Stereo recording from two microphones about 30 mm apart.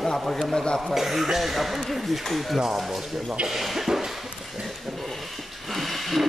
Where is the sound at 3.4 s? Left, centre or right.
Centre.